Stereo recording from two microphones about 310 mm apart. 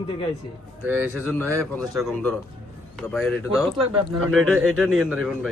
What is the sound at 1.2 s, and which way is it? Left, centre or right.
Speech, centre.